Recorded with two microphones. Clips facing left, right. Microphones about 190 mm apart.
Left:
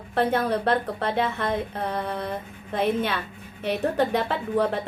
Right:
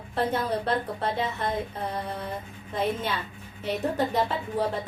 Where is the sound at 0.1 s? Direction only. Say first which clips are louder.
Left 4 dB; 60° left (ahead or behind).